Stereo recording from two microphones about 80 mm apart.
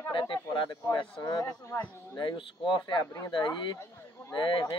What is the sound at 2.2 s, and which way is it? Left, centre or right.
Speech, left.